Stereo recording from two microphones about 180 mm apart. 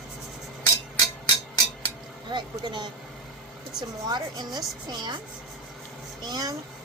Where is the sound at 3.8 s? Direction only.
25° right (ahead or behind).